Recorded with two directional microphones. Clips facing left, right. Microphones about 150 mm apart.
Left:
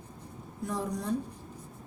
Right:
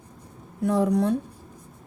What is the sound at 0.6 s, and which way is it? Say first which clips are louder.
Speech: right 12 dB; 70° right (ahead or behind).